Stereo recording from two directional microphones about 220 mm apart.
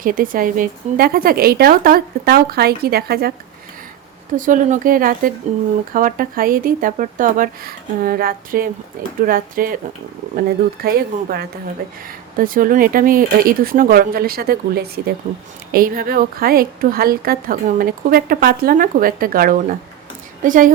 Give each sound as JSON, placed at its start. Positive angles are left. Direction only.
{"t": 0.0, "sound": "speech", "side_deg": -40}
{"t": 4.4, "sound": "a woman's voice", "side_deg": -35}
{"t": 10.8, "sound": "a woman's voice", "side_deg": -45}